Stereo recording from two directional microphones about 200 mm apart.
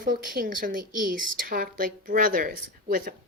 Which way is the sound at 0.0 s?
45° right (ahead or behind).